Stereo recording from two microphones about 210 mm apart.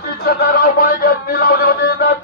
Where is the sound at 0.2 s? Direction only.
45° left (ahead or behind).